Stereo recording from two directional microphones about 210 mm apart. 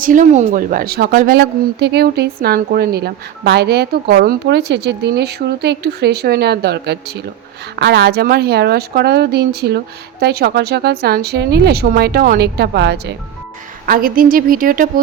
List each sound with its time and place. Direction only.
0.0 s a woman's voice: 40° right (ahead or behind)